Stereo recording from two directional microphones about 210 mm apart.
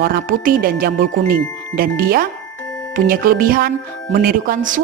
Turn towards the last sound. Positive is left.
turn(degrees=-40)  # may be behind; listen again after turning